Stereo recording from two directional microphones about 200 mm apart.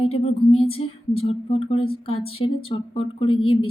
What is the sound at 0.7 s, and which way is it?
Speech, 30° left (ahead or behind).